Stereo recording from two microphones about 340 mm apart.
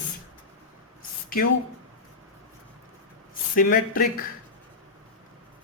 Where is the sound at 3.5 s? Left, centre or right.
Left.